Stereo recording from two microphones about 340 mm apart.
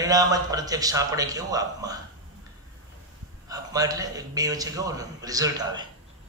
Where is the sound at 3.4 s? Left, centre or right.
Centre.